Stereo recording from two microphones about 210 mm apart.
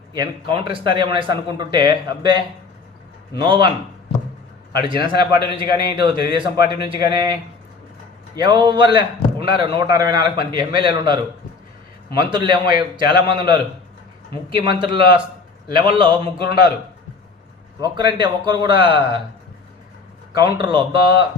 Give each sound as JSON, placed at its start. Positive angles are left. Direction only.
{"t": 0.1, "sound": "a man's voice", "side_deg": -20}
{"t": 3.4, "sound": "a man's voice", "side_deg": -25}
{"t": 4.7, "sound": "a man's voice", "side_deg": -20}
{"t": 8.4, "sound": "a man's voice", "side_deg": -20}
{"t": 17.7, "sound": "a man's voice", "side_deg": -20}
{"t": 20.3, "sound": "a man's voice", "side_deg": -20}